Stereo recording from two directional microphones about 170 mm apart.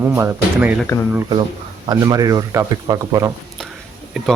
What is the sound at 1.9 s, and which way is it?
Speech, 20° right (ahead or behind).